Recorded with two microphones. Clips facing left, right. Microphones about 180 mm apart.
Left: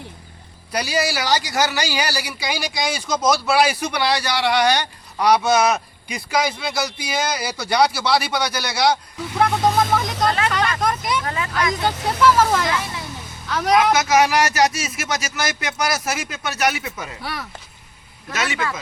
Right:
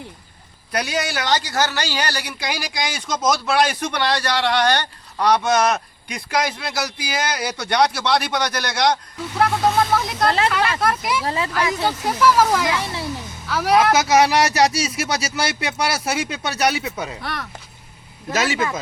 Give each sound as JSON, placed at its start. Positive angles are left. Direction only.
{"t": 0.7, "sound": "speech", "side_deg": 0}
{"t": 10.8, "sound": "vehicle", "side_deg": -5}
{"t": 11.7, "sound": "speech", "side_deg": -10}
{"t": 12.8, "sound": "a child's voice", "side_deg": -30}
{"t": 13.5, "sound": "speech", "side_deg": -5}
{"t": 14.1, "sound": "speech", "side_deg": -30}
{"t": 17.2, "sound": "speech", "side_deg": 5}